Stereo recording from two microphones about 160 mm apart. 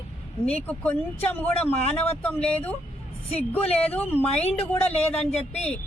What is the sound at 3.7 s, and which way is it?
Speech, 40° left (ahead or behind).